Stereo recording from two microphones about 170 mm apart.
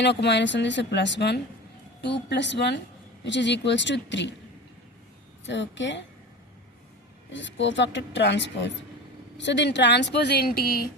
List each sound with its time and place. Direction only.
0.0 s speech: 90° left
5.5 s speech: 90° left
7.3 s a woman's voice: 90° left; by 10.8 s 60° left (ahead or behind)